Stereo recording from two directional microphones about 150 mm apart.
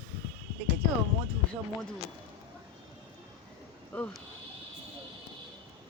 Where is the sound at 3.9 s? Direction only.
10° left (ahead or behind).